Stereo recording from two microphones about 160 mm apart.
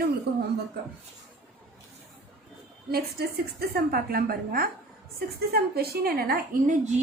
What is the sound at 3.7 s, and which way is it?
A woman's voice, 70° right (ahead or behind).